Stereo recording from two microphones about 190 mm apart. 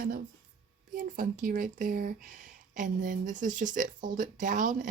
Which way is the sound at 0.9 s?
45° right (ahead or behind).